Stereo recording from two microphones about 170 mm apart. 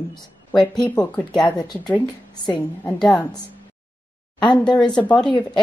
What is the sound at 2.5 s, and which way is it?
Speech, 10° left (ahead or behind).